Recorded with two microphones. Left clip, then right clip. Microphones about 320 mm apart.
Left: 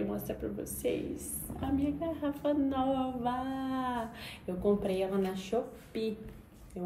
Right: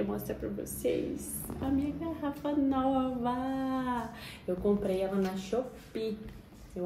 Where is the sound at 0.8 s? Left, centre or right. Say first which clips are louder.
Right 2 dB; centre.